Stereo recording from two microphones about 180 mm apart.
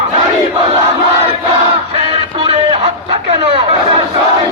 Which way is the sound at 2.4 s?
35° right (ahead or behind).